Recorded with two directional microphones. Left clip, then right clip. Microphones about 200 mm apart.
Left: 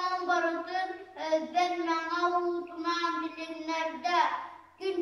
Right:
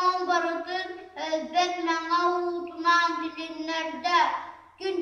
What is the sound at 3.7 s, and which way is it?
Child singing, 15° right (ahead or behind).